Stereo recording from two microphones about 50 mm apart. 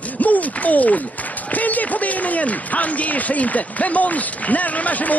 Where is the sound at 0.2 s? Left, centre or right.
Left.